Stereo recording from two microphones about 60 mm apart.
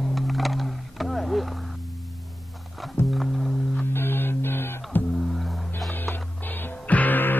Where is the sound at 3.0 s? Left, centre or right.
Left.